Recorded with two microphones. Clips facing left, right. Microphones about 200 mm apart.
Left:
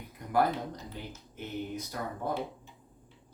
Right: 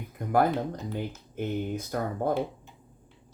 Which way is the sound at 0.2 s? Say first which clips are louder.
Right 9 dB; 50° right (ahead or behind).